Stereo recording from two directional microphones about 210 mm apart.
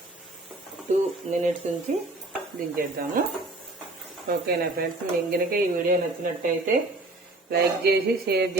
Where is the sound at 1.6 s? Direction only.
35° right (ahead or behind).